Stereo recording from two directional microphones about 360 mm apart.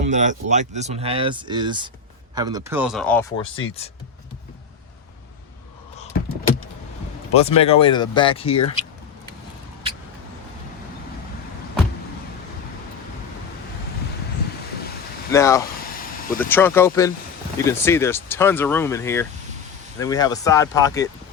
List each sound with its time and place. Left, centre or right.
0.0 s speech: centre
7.3 s speech: centre
15.3 s speech: centre